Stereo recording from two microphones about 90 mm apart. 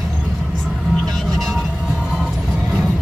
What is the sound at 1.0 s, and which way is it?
Vehicle, centre (ahead or behind).